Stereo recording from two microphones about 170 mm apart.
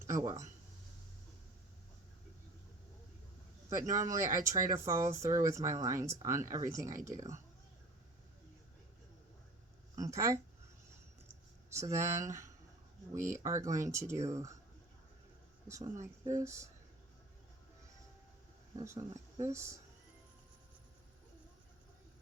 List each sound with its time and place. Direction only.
0.0 s speech: 20° right (ahead or behind)
3.9 s speech: 20° right (ahead or behind)
10.0 s speech: 20° right (ahead or behind)
11.9 s speech: 15° right (ahead or behind)
15.6 s speech: 15° right (ahead or behind)
16.0 s speech: 45° right (ahead or behind)
16.4 s speech: 15° right (ahead or behind)
18.8 s speech: 20° right (ahead or behind)